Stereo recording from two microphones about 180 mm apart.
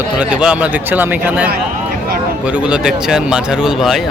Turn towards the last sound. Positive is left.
turn(degrees=0)  # may be behind; listen again after turning